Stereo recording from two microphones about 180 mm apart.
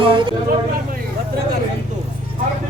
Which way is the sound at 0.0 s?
30° right (ahead or behind).